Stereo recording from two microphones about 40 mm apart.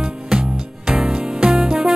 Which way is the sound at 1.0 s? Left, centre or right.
Centre.